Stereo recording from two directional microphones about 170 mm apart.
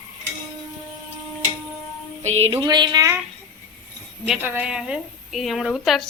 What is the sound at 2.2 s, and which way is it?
Music, 40° right (ahead or behind).